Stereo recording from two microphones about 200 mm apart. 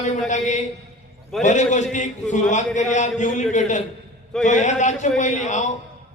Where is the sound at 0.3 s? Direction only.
35° left (ahead or behind).